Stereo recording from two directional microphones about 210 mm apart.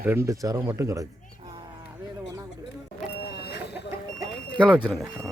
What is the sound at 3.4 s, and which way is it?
Vehicle, 50° left (ahead or behind).